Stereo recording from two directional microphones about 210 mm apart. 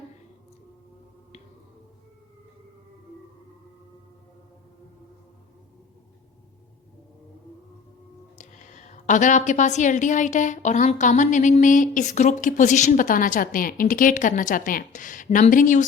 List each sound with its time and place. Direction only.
8.4 s a woman's voice: 35° left (ahead or behind)